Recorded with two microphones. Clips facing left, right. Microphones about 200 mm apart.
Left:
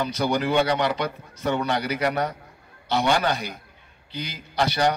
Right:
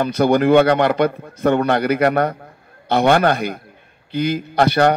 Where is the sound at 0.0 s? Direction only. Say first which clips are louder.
Right 9 dB; 55° right (ahead or behind).